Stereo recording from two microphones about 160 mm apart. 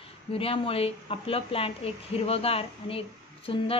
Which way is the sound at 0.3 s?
35° left (ahead or behind).